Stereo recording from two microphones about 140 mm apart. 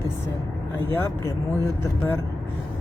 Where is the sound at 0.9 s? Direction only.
15° left (ahead or behind).